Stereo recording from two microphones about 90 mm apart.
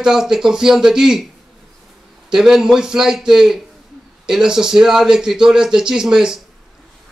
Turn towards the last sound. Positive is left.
turn(degrees=-5)  # may be behind; listen again after turning